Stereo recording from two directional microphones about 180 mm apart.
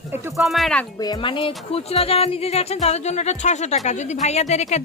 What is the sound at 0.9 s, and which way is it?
Speech, 20° left (ahead or behind).